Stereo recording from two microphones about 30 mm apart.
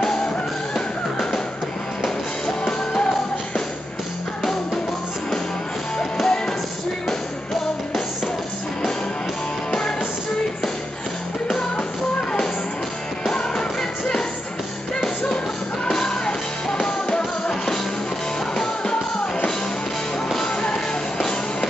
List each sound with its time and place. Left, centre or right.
2.6 s music: left
6.2 s music: left
13.3 s music: left
15.2 s music: left
20.7 s music: centre